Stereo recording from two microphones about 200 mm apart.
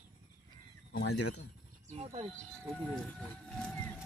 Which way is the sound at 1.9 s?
35° right (ahead or behind).